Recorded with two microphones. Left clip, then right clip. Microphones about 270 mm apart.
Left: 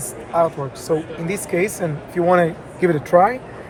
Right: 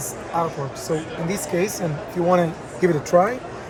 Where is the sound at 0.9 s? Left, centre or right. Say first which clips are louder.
Left 4 dB; centre.